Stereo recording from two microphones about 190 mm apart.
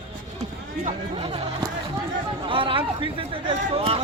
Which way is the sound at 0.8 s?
30° right (ahead or behind).